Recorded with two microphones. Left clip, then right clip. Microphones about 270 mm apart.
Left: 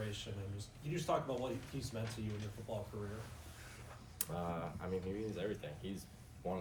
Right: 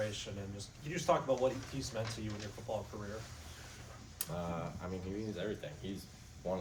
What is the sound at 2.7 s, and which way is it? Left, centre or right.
Speech, right.